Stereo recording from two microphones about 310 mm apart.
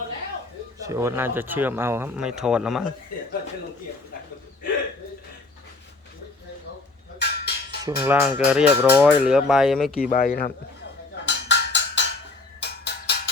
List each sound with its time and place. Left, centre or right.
0.8 s speech: centre
7.2 s a sound: left
7.9 s speech: centre
10.1 s speech: left
11.3 s music: left